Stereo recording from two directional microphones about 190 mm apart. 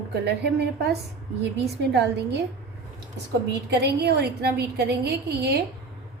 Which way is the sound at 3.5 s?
60° right (ahead or behind).